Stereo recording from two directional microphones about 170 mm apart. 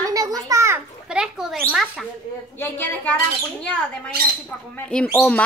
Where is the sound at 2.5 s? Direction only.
10° left (ahead or behind).